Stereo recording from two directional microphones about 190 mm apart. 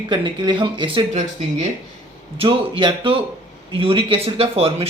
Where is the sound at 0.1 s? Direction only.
25° right (ahead or behind).